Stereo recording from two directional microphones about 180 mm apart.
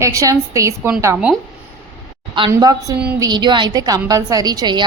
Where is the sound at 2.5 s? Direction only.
20° right (ahead or behind).